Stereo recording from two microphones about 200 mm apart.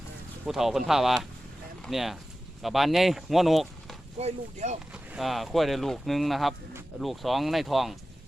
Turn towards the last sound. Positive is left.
turn(degrees=0)  # may be behind; listen again after turning